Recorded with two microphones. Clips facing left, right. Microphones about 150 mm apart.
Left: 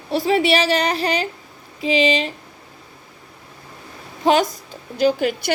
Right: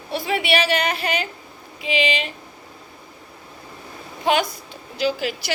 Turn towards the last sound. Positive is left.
turn(degrees=50)  # may be behind; listen again after turning